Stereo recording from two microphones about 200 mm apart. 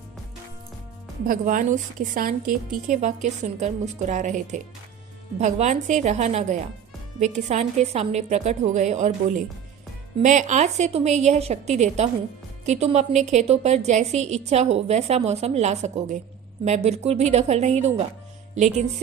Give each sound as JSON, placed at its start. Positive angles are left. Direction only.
{"t": 1.2, "sound": "a woman's voice", "side_deg": -45}